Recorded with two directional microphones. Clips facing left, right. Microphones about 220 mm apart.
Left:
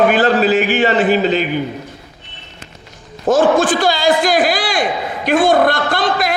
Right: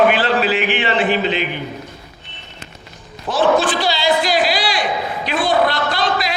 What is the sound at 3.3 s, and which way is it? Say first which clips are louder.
A man's voice: left 4 dB; 50° left (ahead or behind).